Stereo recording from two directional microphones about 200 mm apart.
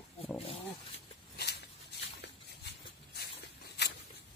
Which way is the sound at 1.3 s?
55° left (ahead or behind).